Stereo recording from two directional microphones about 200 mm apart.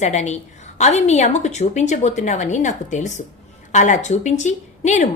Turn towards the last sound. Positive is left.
turn(degrees=35)  # may be behind; listen again after turning